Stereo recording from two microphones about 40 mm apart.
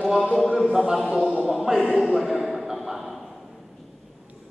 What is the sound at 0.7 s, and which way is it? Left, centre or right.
Speech, centre.